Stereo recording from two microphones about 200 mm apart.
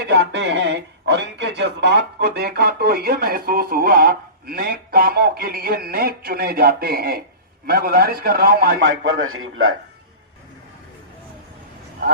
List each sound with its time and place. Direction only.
0.1 s speech: 60° right (ahead or behind)
8.8 s a man's voice: 85° right